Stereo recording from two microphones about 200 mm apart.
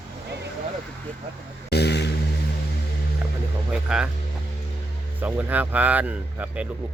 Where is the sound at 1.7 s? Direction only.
55° left (ahead or behind).